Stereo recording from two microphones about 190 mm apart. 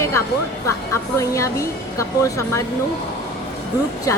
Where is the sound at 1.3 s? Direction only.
15° left (ahead or behind).